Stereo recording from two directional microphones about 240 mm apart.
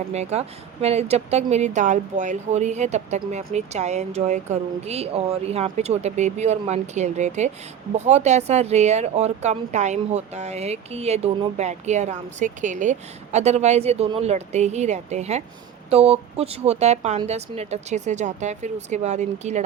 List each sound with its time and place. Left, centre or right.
0.1 s speech: right